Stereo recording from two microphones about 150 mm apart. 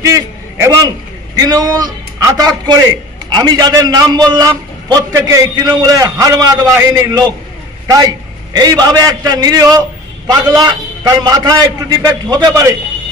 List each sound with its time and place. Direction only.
0.0 s a man's voice: 25° right (ahead or behind)
8.5 s a man's voice: 25° right (ahead or behind)